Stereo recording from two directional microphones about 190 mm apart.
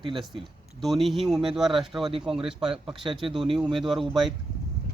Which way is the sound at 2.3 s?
25° right (ahead or behind).